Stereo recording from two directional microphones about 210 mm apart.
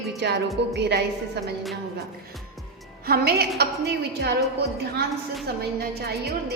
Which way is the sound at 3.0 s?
50° right (ahead or behind).